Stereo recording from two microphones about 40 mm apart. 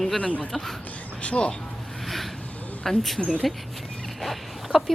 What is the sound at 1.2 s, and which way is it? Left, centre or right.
Speech, left.